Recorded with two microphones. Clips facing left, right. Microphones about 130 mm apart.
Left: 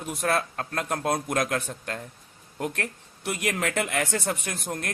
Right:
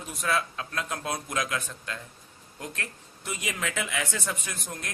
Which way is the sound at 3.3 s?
60° left (ahead or behind).